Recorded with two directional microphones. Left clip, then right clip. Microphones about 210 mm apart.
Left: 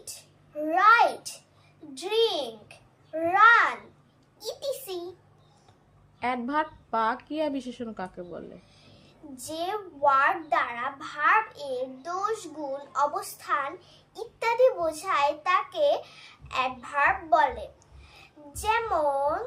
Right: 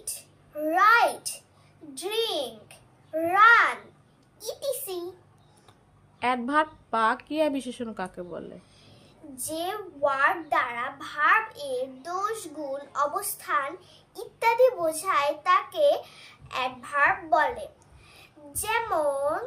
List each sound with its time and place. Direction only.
0.5 s babbling: centre (ahead or behind)
2.0 s a child's voice: centre (ahead or behind)
6.1 s a woman's voice: 10° right (ahead or behind)